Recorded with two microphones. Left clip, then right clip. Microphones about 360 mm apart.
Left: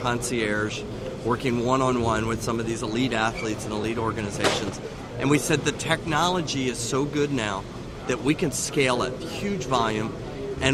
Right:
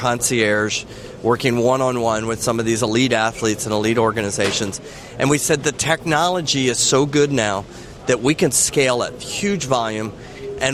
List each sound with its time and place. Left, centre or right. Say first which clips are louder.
0.0 s speech: right 8 dB; right
2.5 s speech: right 9 dB; right